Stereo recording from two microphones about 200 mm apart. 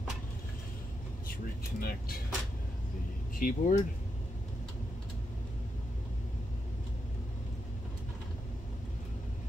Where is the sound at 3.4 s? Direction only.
40° left (ahead or behind).